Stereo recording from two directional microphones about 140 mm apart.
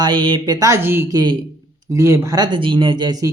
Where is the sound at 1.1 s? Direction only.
35° right (ahead or behind).